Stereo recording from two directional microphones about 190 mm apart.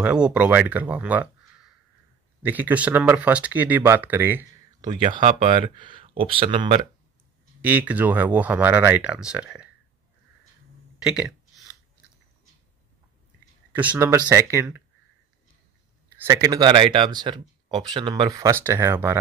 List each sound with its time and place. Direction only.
0.0 s speech: 5° right (ahead or behind)
4.8 s speech: 25° right (ahead or behind)
7.6 s speech: 10° right (ahead or behind)
11.0 s speech: 5° right (ahead or behind)
13.7 s speech: 10° right (ahead or behind)
16.3 s speech: 20° right (ahead or behind)